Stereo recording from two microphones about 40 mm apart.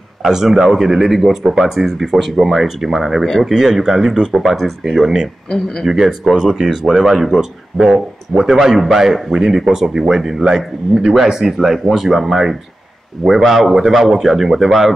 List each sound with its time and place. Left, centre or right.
0.2 s a man's voice: centre
5.5 s speech: centre
5.9 s a man's voice: centre